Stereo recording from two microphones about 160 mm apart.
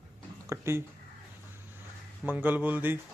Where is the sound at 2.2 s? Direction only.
10° right (ahead or behind).